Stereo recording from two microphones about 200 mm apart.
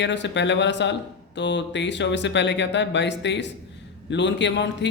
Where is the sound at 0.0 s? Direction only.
60° left (ahead or behind).